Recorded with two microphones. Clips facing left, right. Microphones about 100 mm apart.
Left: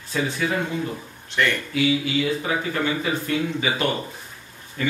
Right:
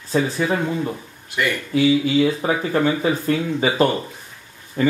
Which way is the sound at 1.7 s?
35° right (ahead or behind).